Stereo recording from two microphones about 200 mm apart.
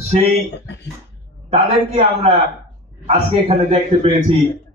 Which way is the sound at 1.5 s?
30° right (ahead or behind).